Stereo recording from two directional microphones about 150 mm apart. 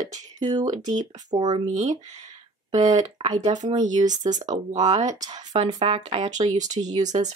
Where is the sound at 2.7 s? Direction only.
50° right (ahead or behind).